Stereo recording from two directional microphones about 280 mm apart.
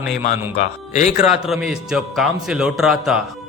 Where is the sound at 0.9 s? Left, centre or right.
Left.